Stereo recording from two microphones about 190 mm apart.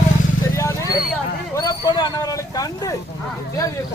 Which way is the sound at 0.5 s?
15° left (ahead or behind).